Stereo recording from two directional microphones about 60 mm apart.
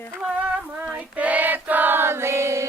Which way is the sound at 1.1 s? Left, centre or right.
Right.